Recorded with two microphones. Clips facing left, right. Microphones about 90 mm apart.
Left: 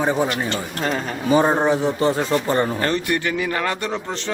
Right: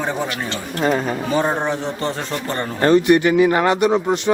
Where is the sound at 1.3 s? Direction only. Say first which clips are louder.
Left 5 dB; 10° left (ahead or behind).